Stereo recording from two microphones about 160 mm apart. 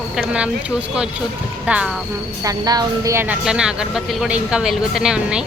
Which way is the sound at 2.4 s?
25° right (ahead or behind).